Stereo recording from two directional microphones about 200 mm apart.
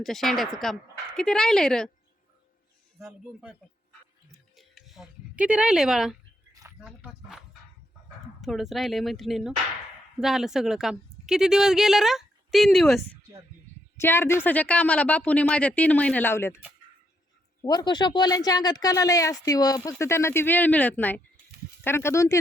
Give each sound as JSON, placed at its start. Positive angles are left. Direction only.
{"t": 0.0, "sound": "a woman's voice", "side_deg": 0}
{"t": 3.0, "sound": "a woman's voice", "side_deg": 0}
{"t": 4.5, "sound": "a sound", "side_deg": 0}
{"t": 6.5, "sound": "a sound", "side_deg": -15}
{"t": 6.8, "sound": "a woman's voice", "side_deg": -5}
{"t": 14.0, "sound": "speech", "side_deg": 10}
{"t": 17.6, "sound": "speech", "side_deg": 20}